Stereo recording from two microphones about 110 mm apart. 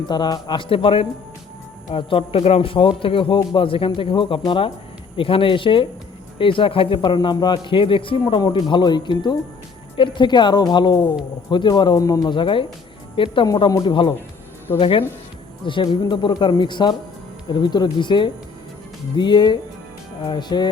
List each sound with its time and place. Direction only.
0.1 s speech: 40° left (ahead or behind)
13.7 s speech: 35° left (ahead or behind)
14.8 s speech: 55° left (ahead or behind)